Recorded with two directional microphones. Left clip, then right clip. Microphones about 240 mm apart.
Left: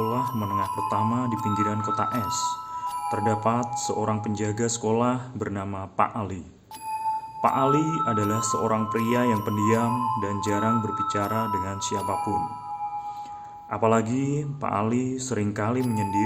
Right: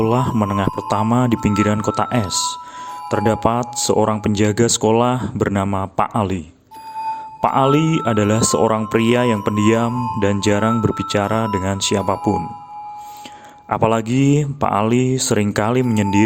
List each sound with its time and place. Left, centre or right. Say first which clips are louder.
0.0 s speech: right 8 dB; right
7.4 s speech: right 7 dB; right
13.7 s speech: right 6 dB; right